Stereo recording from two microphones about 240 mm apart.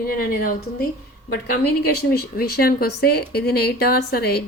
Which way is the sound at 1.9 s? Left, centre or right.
Left.